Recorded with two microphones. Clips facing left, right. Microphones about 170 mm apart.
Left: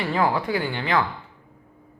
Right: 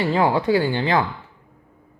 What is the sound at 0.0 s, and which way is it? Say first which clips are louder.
Speech: right 4 dB; 25° right (ahead or behind).